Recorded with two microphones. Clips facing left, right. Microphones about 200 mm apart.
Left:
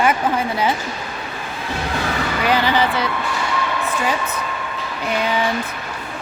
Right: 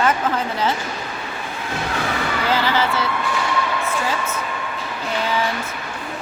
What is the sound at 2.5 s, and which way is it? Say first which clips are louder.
Speech: left 3 dB; 15° left (ahead or behind).